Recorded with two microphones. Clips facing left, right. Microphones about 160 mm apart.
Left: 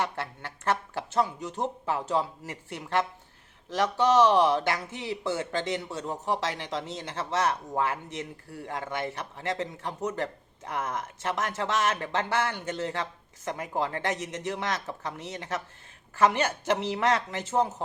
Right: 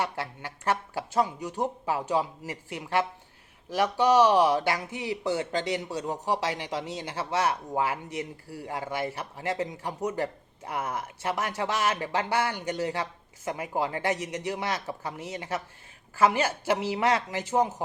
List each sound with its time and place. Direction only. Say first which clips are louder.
0.0 s a man's voice: even; 10° right (ahead or behind)